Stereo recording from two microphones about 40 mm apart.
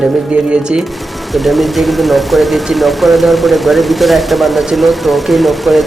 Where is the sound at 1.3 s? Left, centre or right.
Centre.